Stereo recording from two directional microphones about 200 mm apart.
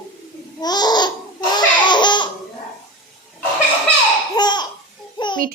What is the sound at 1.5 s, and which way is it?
Laughter, 20° left (ahead or behind).